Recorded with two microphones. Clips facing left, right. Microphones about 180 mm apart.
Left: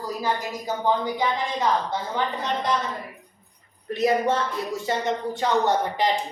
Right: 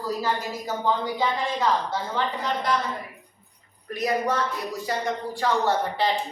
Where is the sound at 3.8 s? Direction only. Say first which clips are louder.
Left 4 dB; 25° left (ahead or behind).